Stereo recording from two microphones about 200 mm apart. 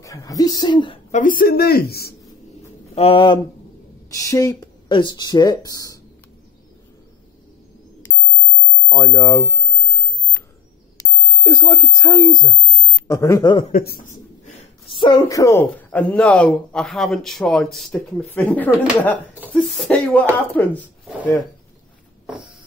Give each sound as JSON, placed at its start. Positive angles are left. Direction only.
{"t": 0.0, "sound": "speech", "side_deg": 15}
{"t": 1.1, "sound": "a woman's voice", "side_deg": 45}
{"t": 2.9, "sound": "speech", "side_deg": 30}
{"t": 4.1, "sound": "speech", "side_deg": 15}
{"t": 8.8, "sound": "speech", "side_deg": 15}
{"t": 10.4, "sound": "a sound", "side_deg": 15}
{"t": 11.0, "sound": "speech", "side_deg": 15}
{"t": 13.7, "sound": "speech", "side_deg": 45}
{"t": 14.9, "sound": "speech", "side_deg": 25}